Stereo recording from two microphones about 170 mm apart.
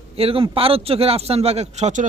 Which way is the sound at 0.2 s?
35° right (ahead or behind).